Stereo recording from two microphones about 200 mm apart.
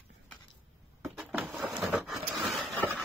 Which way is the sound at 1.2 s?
Centre (ahead or behind).